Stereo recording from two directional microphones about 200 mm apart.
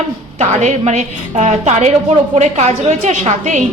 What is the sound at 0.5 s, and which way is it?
A woman's voice, 35° right (ahead or behind).